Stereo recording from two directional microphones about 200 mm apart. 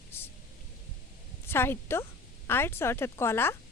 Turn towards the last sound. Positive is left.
turn(degrees=10)  # may be behind; listen again after turning